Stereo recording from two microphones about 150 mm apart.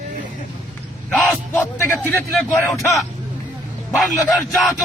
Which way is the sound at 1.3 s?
15° left (ahead or behind).